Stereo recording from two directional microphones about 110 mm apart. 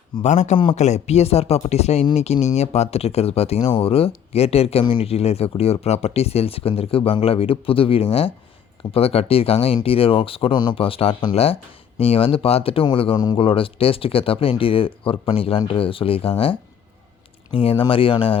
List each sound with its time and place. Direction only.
0.2 s speech: 90° left
0.5 s speech: 50° left (ahead or behind)
0.8 s speech: 90° left; by 11.3 s 50° left (ahead or behind)
11.9 s speech: 60° left (ahead or behind)
17.5 s speech: 55° left (ahead or behind)